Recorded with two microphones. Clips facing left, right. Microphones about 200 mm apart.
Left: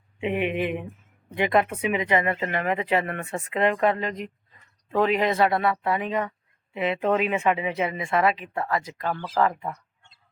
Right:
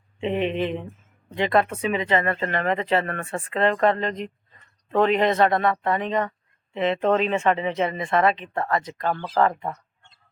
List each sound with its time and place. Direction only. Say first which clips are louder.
0.2 s speech: right 1 dB; 10° left (ahead or behind)
9.5 s speech: right 2 dB; 30° right (ahead or behind)